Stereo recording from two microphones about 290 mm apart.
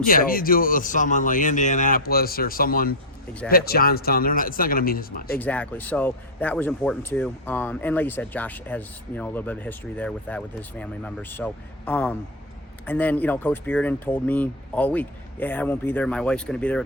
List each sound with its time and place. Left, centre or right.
0.0 s speech: left
5.4 s speech: centre